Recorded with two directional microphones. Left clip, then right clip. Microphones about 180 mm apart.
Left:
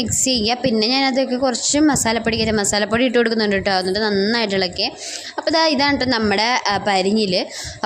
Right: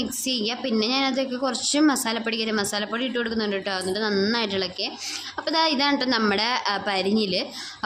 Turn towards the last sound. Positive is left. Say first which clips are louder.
# left 6 dB
turn(degrees=25)  # may be behind; listen again after turning